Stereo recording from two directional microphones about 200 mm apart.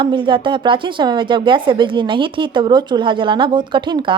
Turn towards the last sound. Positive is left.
turn(degrees=-25)  # may be behind; listen again after turning